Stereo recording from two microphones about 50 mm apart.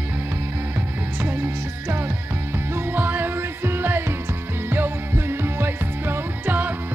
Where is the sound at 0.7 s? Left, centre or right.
Right.